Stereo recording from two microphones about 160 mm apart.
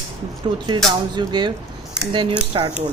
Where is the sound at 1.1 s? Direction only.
25° right (ahead or behind).